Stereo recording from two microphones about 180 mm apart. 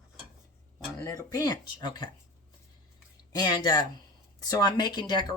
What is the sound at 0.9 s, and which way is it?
Speech, 15° left (ahead or behind).